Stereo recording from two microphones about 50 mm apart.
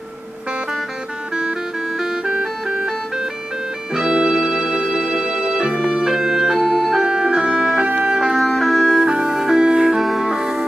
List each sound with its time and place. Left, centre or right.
2.4 s music: centre
3.9 s music: centre
5.9 s organ: centre
7.1 s music: centre
8.1 s music: centre
8.4 s music: centre
8.7 s music: centre
9.0 s music: centre